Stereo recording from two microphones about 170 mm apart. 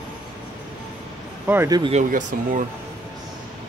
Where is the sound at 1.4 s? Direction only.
10° right (ahead or behind).